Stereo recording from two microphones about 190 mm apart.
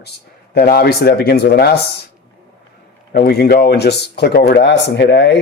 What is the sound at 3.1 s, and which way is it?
Speech, 55° left (ahead or behind).